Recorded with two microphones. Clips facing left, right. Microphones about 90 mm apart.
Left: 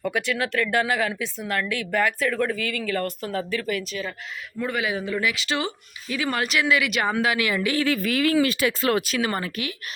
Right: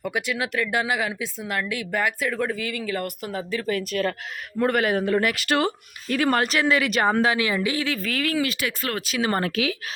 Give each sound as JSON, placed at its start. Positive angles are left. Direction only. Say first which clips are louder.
{"t": 0.0, "sound": "speech", "louder": "left 1 dB", "side_deg": -15}
{"t": 3.9, "sound": "speech", "louder": "right 6 dB", "side_deg": -50}
{"t": 6.4, "sound": "speech", "louder": "right 1 dB", "side_deg": -35}
{"t": 7.8, "sound": "speech", "louder": "left 4 dB", "side_deg": 5}
{"t": 8.2, "sound": "speech", "louder": "left 5 dB", "side_deg": 25}
{"t": 9.5, "sound": "speech", "louder": "right 6 dB", "side_deg": -90}